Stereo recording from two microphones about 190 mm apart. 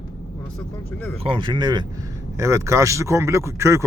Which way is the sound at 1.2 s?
25° right (ahead or behind).